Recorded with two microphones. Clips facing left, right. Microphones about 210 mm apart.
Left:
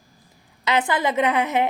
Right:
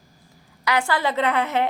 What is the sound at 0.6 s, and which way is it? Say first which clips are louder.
A woman's voice: left 1 dB; 20° left (ahead or behind).